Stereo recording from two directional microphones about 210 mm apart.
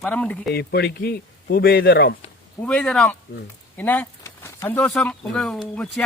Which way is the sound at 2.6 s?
5° left (ahead or behind).